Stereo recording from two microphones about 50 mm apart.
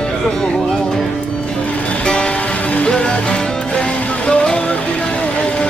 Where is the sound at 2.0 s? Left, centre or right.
Centre.